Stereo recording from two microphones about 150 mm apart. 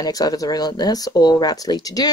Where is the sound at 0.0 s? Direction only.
25° left (ahead or behind).